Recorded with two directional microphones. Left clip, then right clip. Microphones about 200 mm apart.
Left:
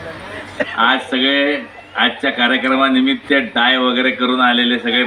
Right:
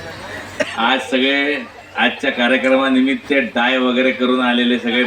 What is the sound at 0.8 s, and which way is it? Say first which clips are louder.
A man's voice: left 2 dB; 20° right (ahead or behind).